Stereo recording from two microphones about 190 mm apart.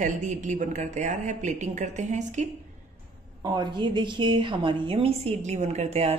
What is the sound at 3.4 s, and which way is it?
A woman's voice, 25° right (ahead or behind).